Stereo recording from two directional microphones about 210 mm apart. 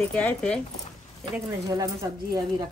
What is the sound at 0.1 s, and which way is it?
Speech, 5° left (ahead or behind).